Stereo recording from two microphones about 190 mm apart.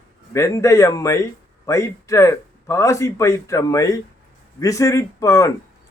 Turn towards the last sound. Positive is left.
turn(degrees=15)  # may be behind; listen again after turning